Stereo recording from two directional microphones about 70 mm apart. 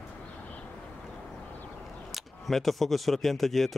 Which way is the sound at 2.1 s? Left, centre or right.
Centre.